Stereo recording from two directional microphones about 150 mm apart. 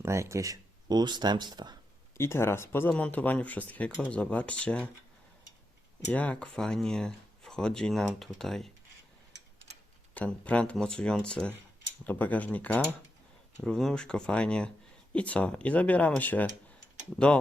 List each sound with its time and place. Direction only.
0.0 s speech: 20° right (ahead or behind)
2.1 s speech: 15° left (ahead or behind)
6.1 s speech: 10° left (ahead or behind)
10.2 s speech: 10° left (ahead or behind)